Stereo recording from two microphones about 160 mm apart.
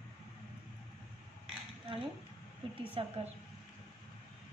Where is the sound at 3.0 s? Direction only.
35° right (ahead or behind).